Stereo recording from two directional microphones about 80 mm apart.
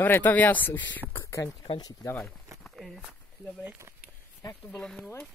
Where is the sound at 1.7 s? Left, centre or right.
Left.